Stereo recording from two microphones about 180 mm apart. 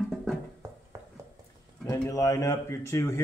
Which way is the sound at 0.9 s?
15° right (ahead or behind).